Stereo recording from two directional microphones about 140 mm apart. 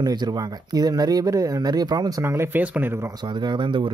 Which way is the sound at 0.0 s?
30° right (ahead or behind).